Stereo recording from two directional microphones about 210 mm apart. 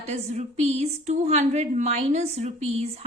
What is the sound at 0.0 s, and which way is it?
A woman's voice, 30° right (ahead or behind).